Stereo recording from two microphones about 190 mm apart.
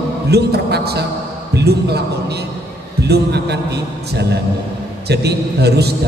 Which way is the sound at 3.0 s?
60° right (ahead or behind).